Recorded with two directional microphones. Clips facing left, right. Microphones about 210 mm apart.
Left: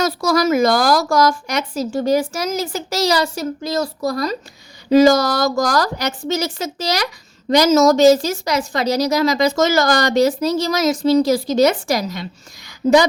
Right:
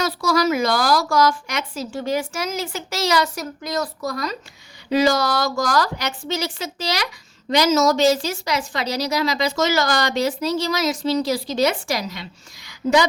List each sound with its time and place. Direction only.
0.0 s a woman's voice: 45° left (ahead or behind)